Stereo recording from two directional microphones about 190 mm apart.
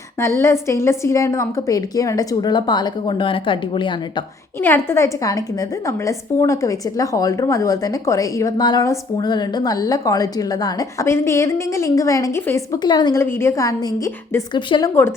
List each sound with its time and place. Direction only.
0.2 s a woman's voice: 15° left (ahead or behind)
4.6 s a woman's voice: 10° left (ahead or behind)